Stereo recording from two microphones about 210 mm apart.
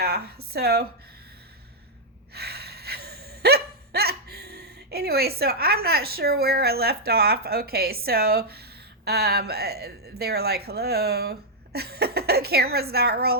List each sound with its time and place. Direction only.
0.0 s a woman's voice: 50° right (ahead or behind)
2.3 s hiccup: 50° right (ahead or behind)
9.0 s a woman's voice: 50° right (ahead or behind)